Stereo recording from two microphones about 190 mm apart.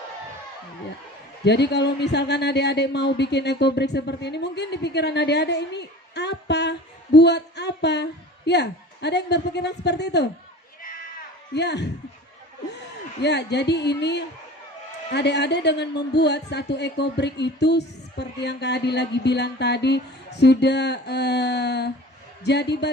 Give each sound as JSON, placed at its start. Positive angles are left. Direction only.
{"t": 1.5, "sound": "a man's voice", "side_deg": 65}
{"t": 11.5, "sound": "a man's voice", "side_deg": 65}
{"t": 13.2, "sound": "a man's voice", "side_deg": 65}